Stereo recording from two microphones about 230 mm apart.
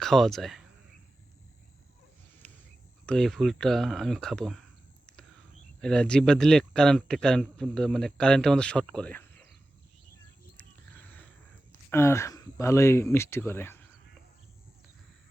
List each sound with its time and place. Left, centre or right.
0.0 s speech: centre
2.4 s a sound: centre
3.1 s speech: centre
5.8 s speech: centre
10.6 s a sound: centre
11.7 s speech: centre